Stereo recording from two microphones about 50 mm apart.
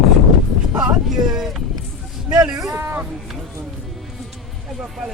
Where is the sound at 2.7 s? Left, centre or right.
Right.